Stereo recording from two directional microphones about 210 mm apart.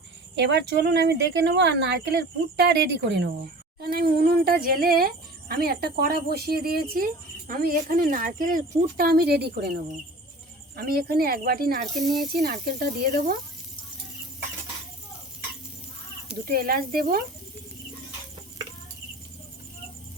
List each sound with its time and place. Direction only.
0.3 s speech: 55° right (ahead or behind)
11.9 s speech: centre (ahead or behind)
12.4 s speech: 45° right (ahead or behind)
16.5 s speech: 45° right (ahead or behind)